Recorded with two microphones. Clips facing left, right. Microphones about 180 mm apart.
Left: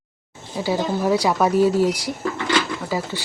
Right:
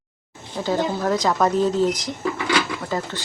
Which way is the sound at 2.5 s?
5° left (ahead or behind).